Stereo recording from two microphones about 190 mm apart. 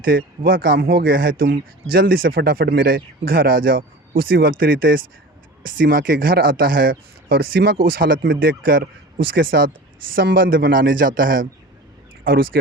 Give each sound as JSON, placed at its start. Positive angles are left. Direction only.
{"t": 0.0, "sound": "speech", "side_deg": -50}